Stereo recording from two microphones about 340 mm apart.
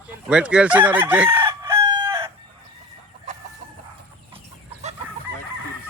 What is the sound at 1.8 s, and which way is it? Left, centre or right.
Chicken, left.